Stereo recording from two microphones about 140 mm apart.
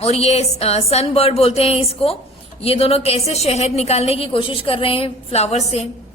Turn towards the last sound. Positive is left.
turn(degrees=50)  # may be behind; listen again after turning